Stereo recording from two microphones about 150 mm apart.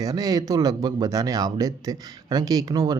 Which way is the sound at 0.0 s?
25° right (ahead or behind).